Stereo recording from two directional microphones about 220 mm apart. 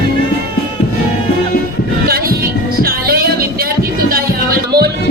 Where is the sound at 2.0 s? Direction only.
45° right (ahead or behind).